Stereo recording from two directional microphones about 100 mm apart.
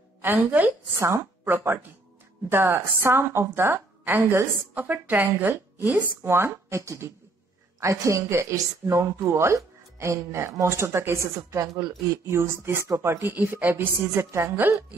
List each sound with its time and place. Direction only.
0.2 s a woman's voice: 20° right (ahead or behind)